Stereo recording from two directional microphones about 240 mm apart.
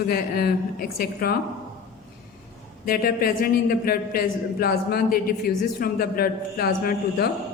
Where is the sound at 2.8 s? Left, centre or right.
Left.